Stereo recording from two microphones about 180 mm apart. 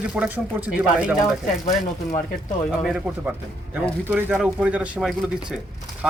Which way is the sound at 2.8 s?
5° right (ahead or behind).